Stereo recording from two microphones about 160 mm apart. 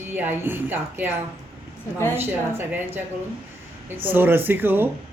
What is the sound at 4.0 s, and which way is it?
Speech, 10° right (ahead or behind).